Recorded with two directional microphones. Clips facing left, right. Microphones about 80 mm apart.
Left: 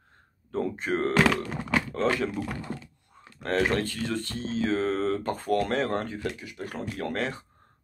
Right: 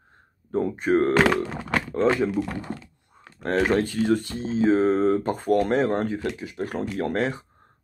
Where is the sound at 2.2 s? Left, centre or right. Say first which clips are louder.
Right 5 dB; centre.